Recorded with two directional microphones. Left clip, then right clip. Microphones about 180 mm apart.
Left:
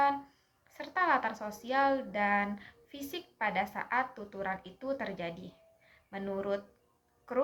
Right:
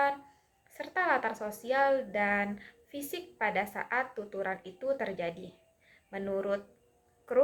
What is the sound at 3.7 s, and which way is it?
A woman's voice, 35° right (ahead or behind).